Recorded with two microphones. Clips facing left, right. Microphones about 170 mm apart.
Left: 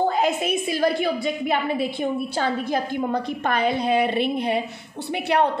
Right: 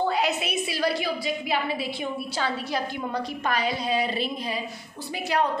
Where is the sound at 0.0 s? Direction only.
45° left (ahead or behind).